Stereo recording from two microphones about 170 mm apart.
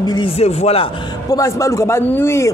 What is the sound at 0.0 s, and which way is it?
Speech, 25° left (ahead or behind).